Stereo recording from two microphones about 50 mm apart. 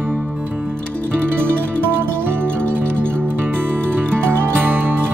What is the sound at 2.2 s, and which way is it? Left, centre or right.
Music, right.